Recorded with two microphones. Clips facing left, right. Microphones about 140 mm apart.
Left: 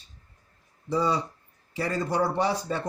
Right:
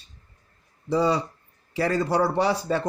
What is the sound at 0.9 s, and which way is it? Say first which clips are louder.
A man's voice: right 3 dB; 90° right.